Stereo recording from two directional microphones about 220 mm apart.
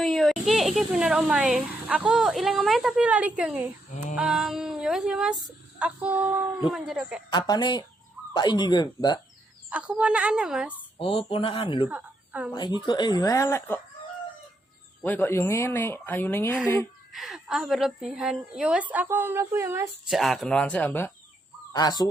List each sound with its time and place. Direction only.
0.0 s a woman's voice: centre (ahead or behind)
4.1 s female singing: 5° right (ahead or behind)
5.8 s a woman's voice: 5° right (ahead or behind)
7.3 s speech: 20° left (ahead or behind)
9.6 s a woman's voice: 5° right (ahead or behind)
10.9 s speech: 25° left (ahead or behind)
11.9 s a sound: 5° right (ahead or behind)
12.5 s speech: 20° left (ahead or behind)
15.0 s speech: 10° left (ahead or behind)
17.1 s a woman's voice: centre (ahead or behind)
20.1 s a woman's voice: centre (ahead or behind)
21.7 s fowl: 15° left (ahead or behind)